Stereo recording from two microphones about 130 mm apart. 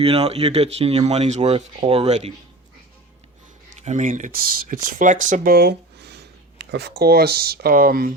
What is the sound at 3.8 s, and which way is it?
Speech, 70° right (ahead or behind).